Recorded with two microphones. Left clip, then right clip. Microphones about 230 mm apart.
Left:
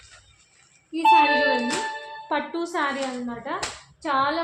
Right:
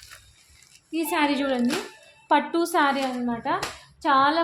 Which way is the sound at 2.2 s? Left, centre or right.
Right.